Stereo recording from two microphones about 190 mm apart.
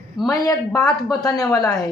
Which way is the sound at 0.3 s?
20° left (ahead or behind).